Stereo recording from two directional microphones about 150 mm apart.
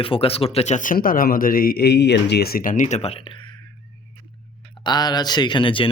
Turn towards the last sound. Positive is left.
turn(degrees=35)  # may be behind; listen again after turning